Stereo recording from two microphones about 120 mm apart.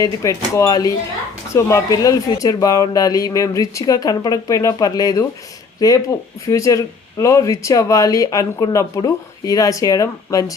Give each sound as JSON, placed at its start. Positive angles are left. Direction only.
{"t": 0.0, "sound": "speech", "side_deg": 25}